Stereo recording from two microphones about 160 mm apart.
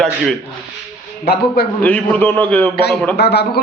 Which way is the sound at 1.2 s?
80° left.